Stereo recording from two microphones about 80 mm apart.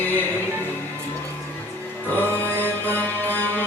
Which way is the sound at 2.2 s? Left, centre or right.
Left.